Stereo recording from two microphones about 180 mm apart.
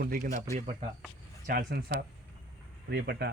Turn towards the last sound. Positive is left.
turn(degrees=-65)  # may be behind; listen again after turning